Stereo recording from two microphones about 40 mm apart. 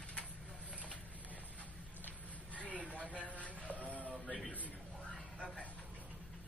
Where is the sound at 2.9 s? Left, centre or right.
Left.